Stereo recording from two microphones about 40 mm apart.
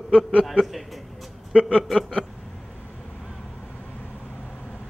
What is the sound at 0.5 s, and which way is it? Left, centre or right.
Speech, centre.